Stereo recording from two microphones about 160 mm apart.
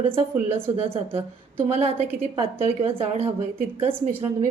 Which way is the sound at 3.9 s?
15° right (ahead or behind).